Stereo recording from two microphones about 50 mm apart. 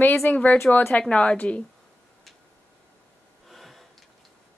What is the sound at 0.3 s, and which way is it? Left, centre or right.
Speech, left.